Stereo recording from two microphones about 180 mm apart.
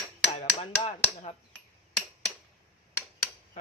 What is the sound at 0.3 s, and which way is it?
Chop, 30° left (ahead or behind).